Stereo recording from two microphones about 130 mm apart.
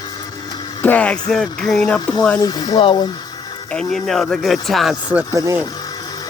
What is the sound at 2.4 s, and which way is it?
Speech, 35° left (ahead or behind).